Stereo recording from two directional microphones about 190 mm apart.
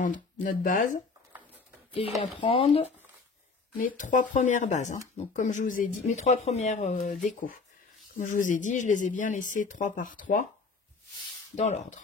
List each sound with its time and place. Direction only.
0.0 s speech: 45° left (ahead or behind)
2.4 s speech: 30° left (ahead or behind)
3.7 s speech: 45° left (ahead or behind)
11.5 s speech: 35° left (ahead or behind)